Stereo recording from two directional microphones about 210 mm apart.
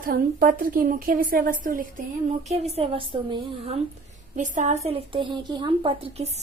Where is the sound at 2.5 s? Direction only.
30° right (ahead or behind).